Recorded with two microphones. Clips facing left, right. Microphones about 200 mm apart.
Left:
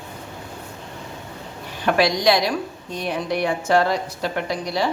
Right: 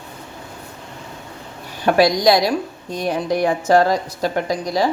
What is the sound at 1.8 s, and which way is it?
A woman's voice, 40° right (ahead or behind).